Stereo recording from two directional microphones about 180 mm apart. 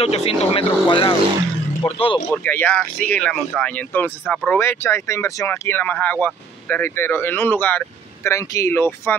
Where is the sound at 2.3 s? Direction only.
10° left (ahead or behind).